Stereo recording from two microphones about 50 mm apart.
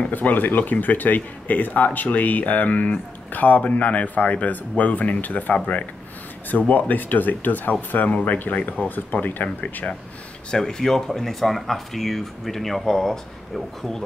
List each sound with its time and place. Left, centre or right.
0.1 s speech: left
10.5 s speech: centre